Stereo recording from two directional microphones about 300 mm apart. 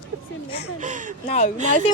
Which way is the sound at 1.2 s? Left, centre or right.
Left.